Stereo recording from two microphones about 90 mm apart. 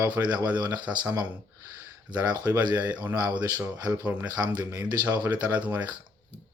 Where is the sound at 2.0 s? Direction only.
50° right (ahead or behind).